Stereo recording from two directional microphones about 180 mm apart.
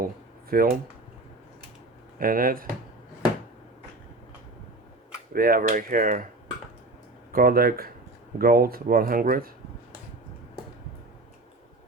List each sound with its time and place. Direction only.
0.5 s speech: 55° right (ahead or behind)
2.1 s speech: 50° right (ahead or behind)
5.3 s speech: 55° right (ahead or behind)
7.3 s speech: 55° right (ahead or behind)